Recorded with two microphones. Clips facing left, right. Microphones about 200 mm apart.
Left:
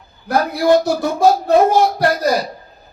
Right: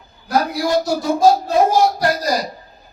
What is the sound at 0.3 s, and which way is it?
Speech, 60° left (ahead or behind).